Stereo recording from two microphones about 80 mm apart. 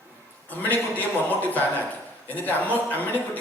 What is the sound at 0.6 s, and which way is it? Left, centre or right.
A man's voice, left.